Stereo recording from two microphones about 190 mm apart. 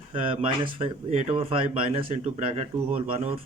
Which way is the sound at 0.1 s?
30° right (ahead or behind).